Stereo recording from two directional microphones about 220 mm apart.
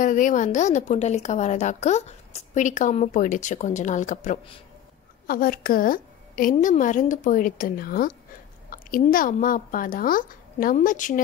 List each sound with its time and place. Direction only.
0.0 s a woman's voice: 35° left (ahead or behind)